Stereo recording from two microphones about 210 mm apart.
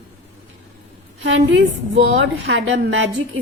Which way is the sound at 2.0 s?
55° right (ahead or behind).